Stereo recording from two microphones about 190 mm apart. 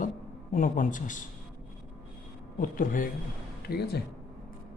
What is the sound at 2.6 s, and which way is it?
Speech, 45° left (ahead or behind).